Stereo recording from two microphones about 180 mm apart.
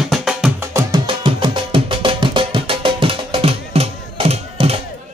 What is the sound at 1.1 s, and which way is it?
Music, 30° right (ahead or behind).